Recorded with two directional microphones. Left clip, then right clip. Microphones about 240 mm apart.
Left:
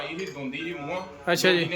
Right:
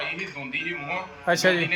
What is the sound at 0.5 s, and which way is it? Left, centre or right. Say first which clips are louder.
A man's voice: right 5 dB; centre.